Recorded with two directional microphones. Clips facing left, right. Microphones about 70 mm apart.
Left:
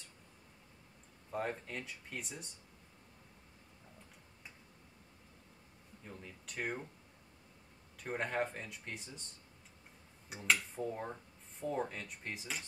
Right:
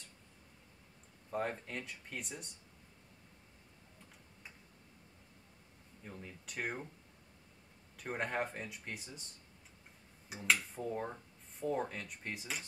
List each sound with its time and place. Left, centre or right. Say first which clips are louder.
1.3 s speech: right 1 dB; centre
6.0 s speech: right 1 dB; centre
8.0 s speech: left 1 dB; centre
10.3 s speech: even; centre